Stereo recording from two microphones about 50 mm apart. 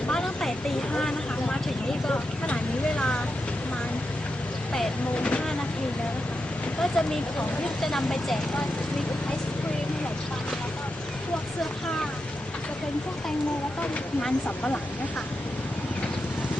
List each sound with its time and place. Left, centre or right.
0.1 s vehicle: centre
0.9 s a sound: centre
5.1 s vehicle: left
6.8 s vehicle: centre
7.8 s speech: centre
14.2 s speech: left